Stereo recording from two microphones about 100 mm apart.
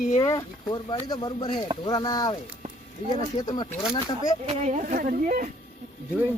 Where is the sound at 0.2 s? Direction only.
40° left (ahead or behind).